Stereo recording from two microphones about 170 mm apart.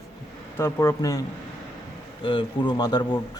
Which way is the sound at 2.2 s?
30° left (ahead or behind).